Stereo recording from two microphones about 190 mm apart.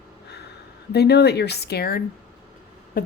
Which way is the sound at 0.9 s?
60° left (ahead or behind).